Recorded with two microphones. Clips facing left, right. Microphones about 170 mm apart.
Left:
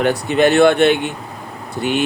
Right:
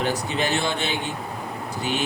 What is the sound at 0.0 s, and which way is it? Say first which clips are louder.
Speech: left 10 dB; 65° left (ahead or behind).